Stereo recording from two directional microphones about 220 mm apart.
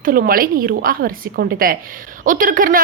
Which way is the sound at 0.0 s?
40° right (ahead or behind).